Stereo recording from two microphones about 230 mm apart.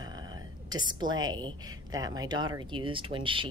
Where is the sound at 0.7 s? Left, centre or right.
Centre.